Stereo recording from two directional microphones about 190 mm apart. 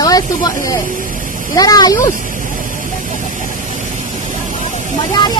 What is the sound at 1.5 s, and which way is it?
Speech, 20° left (ahead or behind).